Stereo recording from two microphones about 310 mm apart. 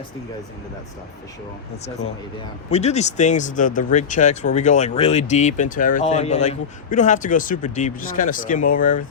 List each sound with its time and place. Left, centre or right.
2.6 s speech: left